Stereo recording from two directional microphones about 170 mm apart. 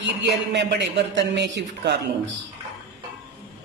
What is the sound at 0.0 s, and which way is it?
A man's voice, 90° right.